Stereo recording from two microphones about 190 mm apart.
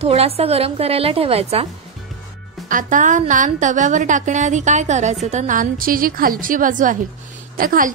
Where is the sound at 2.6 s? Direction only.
45° right (ahead or behind).